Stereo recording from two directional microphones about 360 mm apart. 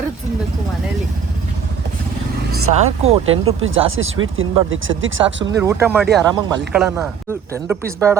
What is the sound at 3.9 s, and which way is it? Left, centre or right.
Speech, right.